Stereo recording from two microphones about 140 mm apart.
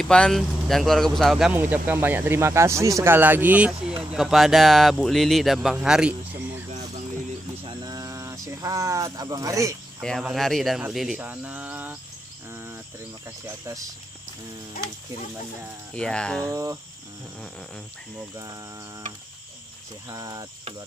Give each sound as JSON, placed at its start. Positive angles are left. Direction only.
{"t": 0.0, "sound": "speech", "side_deg": 5}
{"t": 1.5, "sound": "speech", "side_deg": -15}
{"t": 7.6, "sound": "a sound", "side_deg": -30}
{"t": 10.0, "sound": "speech", "side_deg": 0}
{"t": 12.4, "sound": "cricket", "side_deg": -20}
{"t": 15.9, "sound": "speech", "side_deg": 5}
{"t": 16.4, "sound": "speech", "side_deg": -25}
{"t": 20.1, "sound": "speech", "side_deg": -25}